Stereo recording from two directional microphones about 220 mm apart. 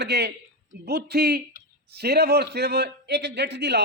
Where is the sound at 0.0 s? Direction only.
50° right (ahead or behind).